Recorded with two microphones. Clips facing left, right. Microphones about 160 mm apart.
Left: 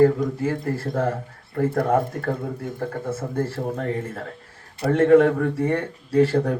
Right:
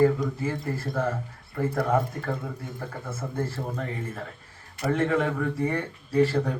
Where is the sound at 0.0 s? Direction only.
55° left (ahead or behind).